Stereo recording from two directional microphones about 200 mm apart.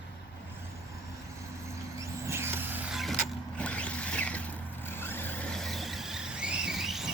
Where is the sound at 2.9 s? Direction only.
Centre (ahead or behind).